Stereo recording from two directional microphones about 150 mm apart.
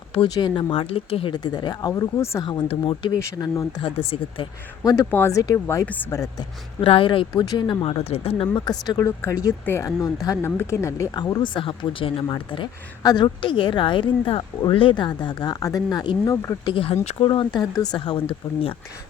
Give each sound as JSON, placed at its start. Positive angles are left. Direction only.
{"t": 0.3, "sound": "speech", "side_deg": 30}
{"t": 2.4, "sound": "speech", "side_deg": 30}
{"t": 3.8, "sound": "speech", "side_deg": 35}
{"t": 4.8, "sound": "speech", "side_deg": 20}
{"t": 6.8, "sound": "speech", "side_deg": 35}
{"t": 16.7, "sound": "speech", "side_deg": 40}
{"t": 17.2, "sound": "speech", "side_deg": 30}